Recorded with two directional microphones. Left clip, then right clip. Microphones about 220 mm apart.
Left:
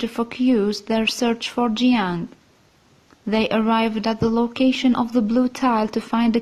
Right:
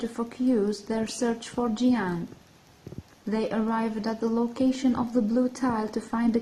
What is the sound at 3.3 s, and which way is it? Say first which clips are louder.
Speech: left 8 dB; 40° left (ahead or behind).